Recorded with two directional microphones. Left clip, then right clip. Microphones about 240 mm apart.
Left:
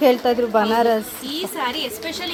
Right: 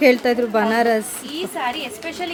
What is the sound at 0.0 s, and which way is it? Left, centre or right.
A woman's voice, centre.